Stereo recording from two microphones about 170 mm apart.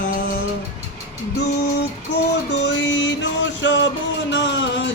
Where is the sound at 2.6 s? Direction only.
90° left.